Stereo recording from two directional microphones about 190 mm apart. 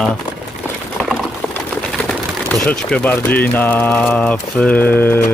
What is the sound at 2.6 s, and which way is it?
Speech, 5° left (ahead or behind).